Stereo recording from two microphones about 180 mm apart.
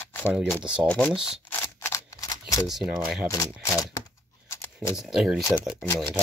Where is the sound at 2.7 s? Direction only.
Centre (ahead or behind).